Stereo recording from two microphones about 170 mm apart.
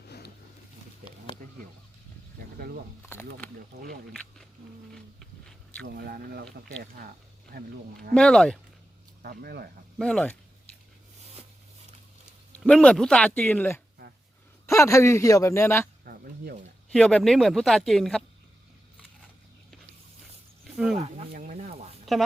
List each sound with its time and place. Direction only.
2.6 s speech: 65° right (ahead or behind)
4.1 s speech: centre (ahead or behind)
4.9 s a sound: 5° left (ahead or behind)
5.8 s speech: 65° right (ahead or behind)
7.5 s speech: 65° right (ahead or behind)
8.1 s speech: 5° left (ahead or behind)
9.2 s speech: 65° right (ahead or behind)
10.0 s speech: 5° left (ahead or behind)
12.5 s speech: 5° left (ahead or behind)
16.0 s a sound: 60° right (ahead or behind)
16.9 s speech: 5° left (ahead or behind)
20.7 s a sound: 5° right (ahead or behind)
21.0 s stir: 45° right (ahead or behind)